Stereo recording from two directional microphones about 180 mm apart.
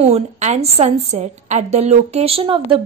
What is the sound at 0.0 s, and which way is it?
A woman's voice, 35° right (ahead or behind).